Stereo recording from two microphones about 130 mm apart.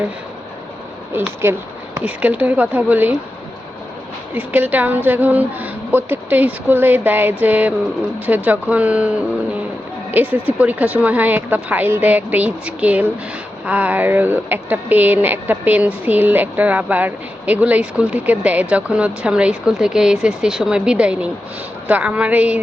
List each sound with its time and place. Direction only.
1.1 s speech: 20° right (ahead or behind)
4.4 s speech: 15° right (ahead or behind)